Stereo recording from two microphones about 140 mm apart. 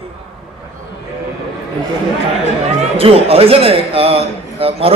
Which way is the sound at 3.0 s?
45° right (ahead or behind).